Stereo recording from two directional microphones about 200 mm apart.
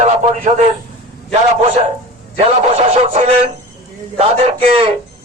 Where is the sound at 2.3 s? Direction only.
35° right (ahead or behind).